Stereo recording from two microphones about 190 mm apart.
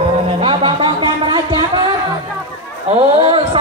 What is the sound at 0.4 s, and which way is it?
Music, 25° right (ahead or behind).